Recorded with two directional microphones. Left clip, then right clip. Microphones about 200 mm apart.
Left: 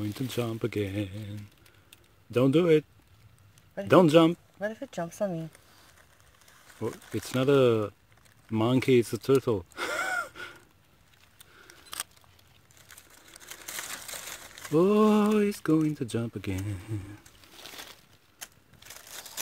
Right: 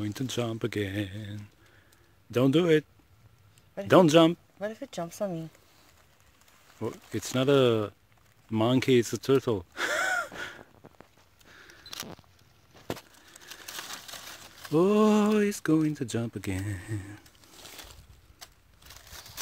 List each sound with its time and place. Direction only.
0.0 s speech: centre (ahead or behind)
6.8 s speech: centre (ahead or behind)
11.5 s single-lens reflex camera: centre (ahead or behind)
13.7 s a sound: 25° left (ahead or behind)
14.7 s speech: centre (ahead or behind)